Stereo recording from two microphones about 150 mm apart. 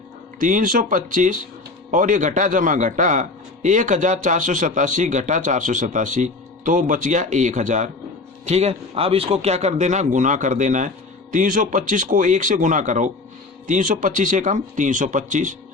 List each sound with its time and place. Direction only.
0.3 s a man's voice: 60° right (ahead or behind)